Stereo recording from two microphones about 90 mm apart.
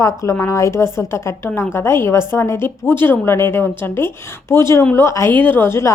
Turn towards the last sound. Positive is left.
turn(degrees=30)  # may be behind; listen again after turning